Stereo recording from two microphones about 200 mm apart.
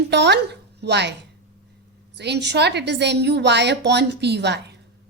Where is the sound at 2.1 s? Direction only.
55° right (ahead or behind).